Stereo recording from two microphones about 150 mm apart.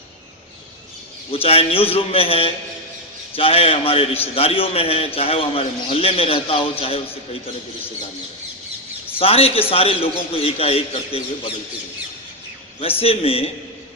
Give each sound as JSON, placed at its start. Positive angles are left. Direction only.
{"t": 1.3, "sound": "a man's voice", "side_deg": 40}
{"t": 9.1, "sound": "a man's voice", "side_deg": 40}
{"t": 13.0, "sound": "a man's voice", "side_deg": 40}